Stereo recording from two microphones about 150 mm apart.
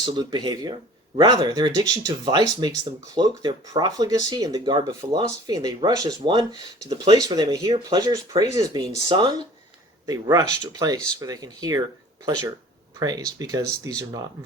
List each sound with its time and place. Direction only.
0.0 s speech: 25° right (ahead or behind)
13.0 s speech: 25° right (ahead or behind)